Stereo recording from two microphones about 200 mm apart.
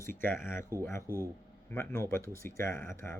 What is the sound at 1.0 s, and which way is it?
Speech, 15° right (ahead or behind).